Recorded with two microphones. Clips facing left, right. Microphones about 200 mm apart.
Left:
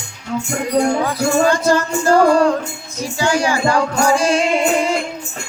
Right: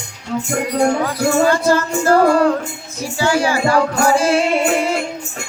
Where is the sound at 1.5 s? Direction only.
15° left (ahead or behind).